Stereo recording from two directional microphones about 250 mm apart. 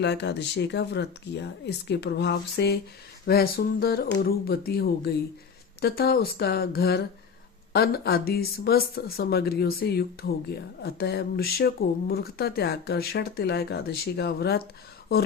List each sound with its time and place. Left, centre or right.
0.0 s speech: left